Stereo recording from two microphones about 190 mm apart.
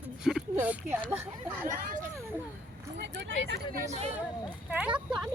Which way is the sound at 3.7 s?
35° right (ahead or behind).